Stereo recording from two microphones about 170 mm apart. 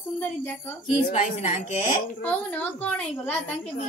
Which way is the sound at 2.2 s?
10° left (ahead or behind).